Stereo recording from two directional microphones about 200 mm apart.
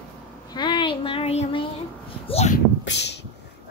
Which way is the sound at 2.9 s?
60° left (ahead or behind).